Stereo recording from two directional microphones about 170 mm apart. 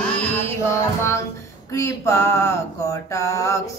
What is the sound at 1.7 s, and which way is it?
Mantra, 15° left (ahead or behind).